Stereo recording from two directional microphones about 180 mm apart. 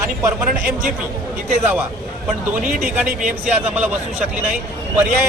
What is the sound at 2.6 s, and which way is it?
Speech, 50° right (ahead or behind).